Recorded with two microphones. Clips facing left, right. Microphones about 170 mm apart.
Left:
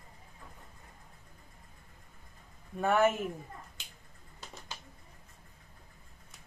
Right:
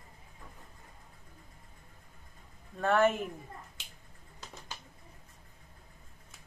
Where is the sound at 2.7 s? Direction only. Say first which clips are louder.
Even; 10° left (ahead or behind).